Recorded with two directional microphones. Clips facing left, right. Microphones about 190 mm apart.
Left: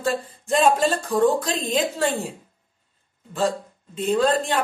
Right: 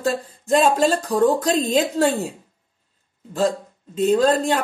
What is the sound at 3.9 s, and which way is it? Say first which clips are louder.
Speech: right 3 dB; 40° right (ahead or behind).